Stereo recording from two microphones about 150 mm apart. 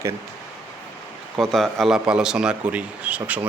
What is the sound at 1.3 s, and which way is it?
Speech, 5° left (ahead or behind).